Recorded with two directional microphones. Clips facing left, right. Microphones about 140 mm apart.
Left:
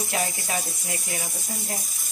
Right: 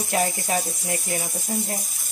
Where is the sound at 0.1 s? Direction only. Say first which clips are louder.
Right 7 dB; 40° right (ahead or behind).